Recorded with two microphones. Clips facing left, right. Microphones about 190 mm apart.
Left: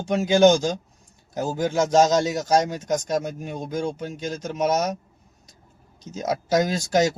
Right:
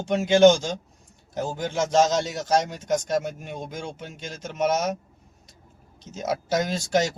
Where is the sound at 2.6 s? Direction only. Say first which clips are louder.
Left 2 dB; 45° left (ahead or behind).